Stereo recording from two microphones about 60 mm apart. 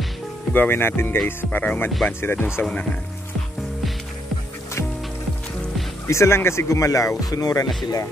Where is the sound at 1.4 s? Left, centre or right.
Left.